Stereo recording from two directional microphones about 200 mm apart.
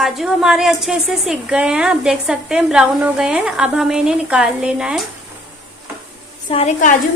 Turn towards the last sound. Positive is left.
turn(degrees=30)  # may be behind; listen again after turning